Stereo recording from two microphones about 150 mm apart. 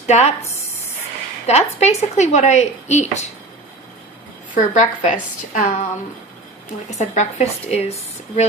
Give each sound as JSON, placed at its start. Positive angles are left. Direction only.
{"t": 0.1, "sound": "speech", "side_deg": 50}
{"t": 1.5, "sound": "speech", "side_deg": 45}
{"t": 4.5, "sound": "a woman's voice", "side_deg": 55}
{"t": 6.9, "sound": "speech", "side_deg": 50}